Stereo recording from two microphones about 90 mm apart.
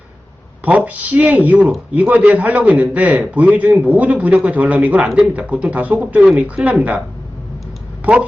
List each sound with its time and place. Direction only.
0.6 s a man's voice: 15° right (ahead or behind)
8.0 s a woman's voice: 20° right (ahead or behind)